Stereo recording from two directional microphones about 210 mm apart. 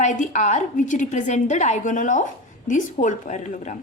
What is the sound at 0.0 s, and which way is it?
Speech, 35° left (ahead or behind).